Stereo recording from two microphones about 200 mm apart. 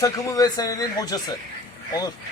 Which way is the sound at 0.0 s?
20° left (ahead or behind).